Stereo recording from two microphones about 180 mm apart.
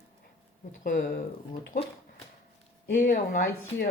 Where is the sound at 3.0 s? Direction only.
45° left (ahead or behind).